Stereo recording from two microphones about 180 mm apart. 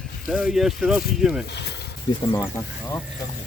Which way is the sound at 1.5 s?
65° left (ahead or behind).